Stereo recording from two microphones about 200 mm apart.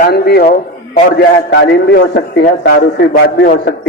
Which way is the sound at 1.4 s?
55° left (ahead or behind).